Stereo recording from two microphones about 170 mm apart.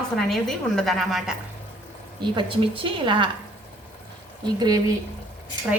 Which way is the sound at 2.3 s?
30° right (ahead or behind).